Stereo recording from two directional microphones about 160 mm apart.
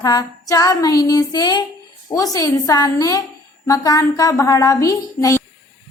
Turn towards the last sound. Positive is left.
turn(degrees=20)  # may be behind; listen again after turning